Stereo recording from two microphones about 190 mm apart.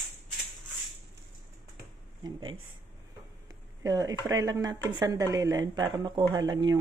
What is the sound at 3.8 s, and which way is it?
Speech, 20° right (ahead or behind).